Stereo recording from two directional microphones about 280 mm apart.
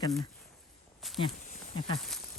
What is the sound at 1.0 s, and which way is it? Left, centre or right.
Speech, centre.